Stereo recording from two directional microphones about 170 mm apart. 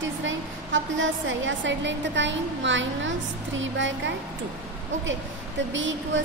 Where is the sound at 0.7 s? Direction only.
90° right.